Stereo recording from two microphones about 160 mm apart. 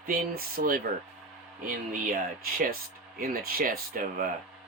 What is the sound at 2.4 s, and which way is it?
Speech, 65° right (ahead or behind).